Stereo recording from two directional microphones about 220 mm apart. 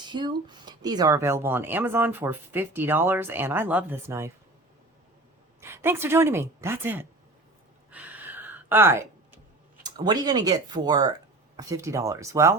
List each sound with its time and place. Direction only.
0.0 s speech: 20° right (ahead or behind)
5.5 s a woman's voice: 10° right (ahead or behind)
7.9 s a sound: 5° right (ahead or behind)
9.8 s speech: 20° right (ahead or behind)